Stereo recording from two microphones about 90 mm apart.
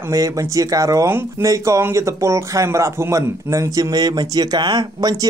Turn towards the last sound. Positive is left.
turn(degrees=-50)  # may be behind; listen again after turning